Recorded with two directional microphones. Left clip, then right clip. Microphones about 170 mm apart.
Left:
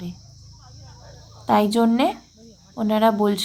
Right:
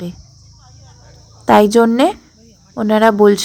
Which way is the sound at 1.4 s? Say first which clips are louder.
Right 9 dB; 35° right (ahead or behind).